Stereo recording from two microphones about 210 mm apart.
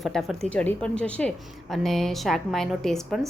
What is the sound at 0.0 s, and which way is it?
A woman's voice, centre (ahead or behind).